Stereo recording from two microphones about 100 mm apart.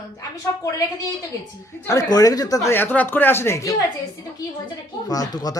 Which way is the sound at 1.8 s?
35° left (ahead or behind).